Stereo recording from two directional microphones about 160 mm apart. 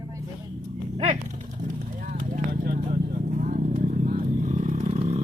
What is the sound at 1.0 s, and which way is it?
Speech, 45° right (ahead or behind).